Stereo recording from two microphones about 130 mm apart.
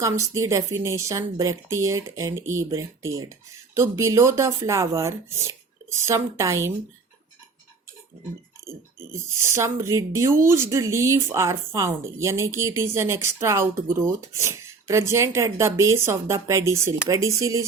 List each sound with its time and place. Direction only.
0.0 s speech: 25° right (ahead or behind)
9.4 s speech: 20° right (ahead or behind)